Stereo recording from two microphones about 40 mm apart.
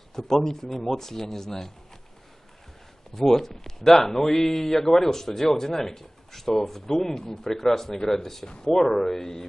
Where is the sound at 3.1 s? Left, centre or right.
Centre.